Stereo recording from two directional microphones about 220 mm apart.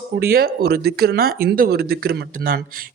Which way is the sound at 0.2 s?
45° right (ahead or behind).